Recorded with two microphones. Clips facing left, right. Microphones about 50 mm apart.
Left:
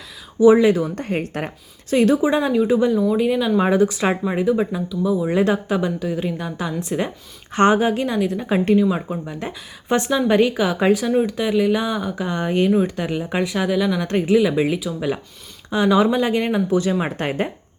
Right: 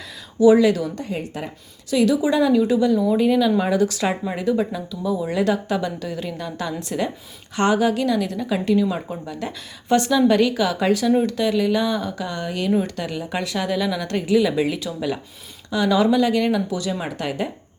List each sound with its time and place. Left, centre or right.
0.3 s a woman's voice: left
0.9 s a woman's voice: left
1.9 s a woman's voice: left
3.1 s speech: centre
3.6 s a woman's voice: left
5.3 s a woman's voice: left
8.9 s a woman's voice: centre
12.7 s speech: centre
14.0 s a woman's voice: left